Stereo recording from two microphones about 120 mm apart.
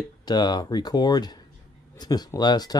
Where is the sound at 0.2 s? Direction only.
35° left (ahead or behind).